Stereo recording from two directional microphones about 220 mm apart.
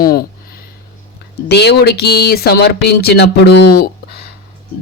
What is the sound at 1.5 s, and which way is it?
Speech, 50° left (ahead or behind).